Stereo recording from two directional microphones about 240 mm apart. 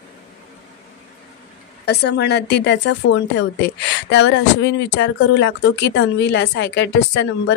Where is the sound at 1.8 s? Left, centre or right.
Left.